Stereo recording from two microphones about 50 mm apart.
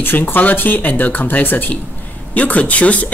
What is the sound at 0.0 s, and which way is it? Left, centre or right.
Speech, left.